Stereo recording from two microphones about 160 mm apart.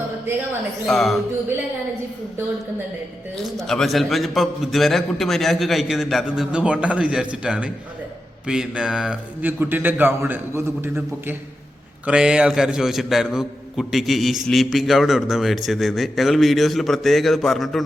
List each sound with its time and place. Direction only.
0.9 s a man's voice: centre (ahead or behind)
3.3 s a man's voice: centre (ahead or behind)